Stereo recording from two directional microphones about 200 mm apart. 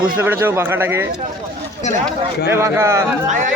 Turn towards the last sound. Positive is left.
turn(degrees=-15)  # may be behind; listen again after turning